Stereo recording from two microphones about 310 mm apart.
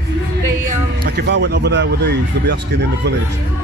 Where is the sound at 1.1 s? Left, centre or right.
Right.